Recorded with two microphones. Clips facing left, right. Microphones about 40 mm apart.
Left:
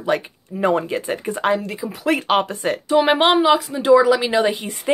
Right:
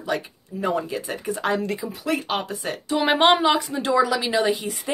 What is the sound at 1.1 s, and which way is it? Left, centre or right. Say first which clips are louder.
Speech: left 5 dB; left.